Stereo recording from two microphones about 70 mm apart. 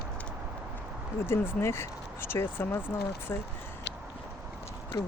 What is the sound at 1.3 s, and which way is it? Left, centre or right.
Speech, left.